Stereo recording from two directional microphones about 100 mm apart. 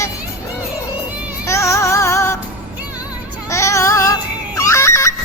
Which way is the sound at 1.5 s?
30° left (ahead or behind).